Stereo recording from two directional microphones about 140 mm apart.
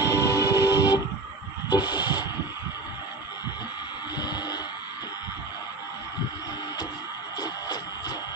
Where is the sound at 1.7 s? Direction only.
30° left (ahead or behind).